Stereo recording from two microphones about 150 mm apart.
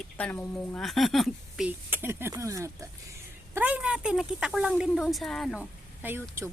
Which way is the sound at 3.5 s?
10° right (ahead or behind).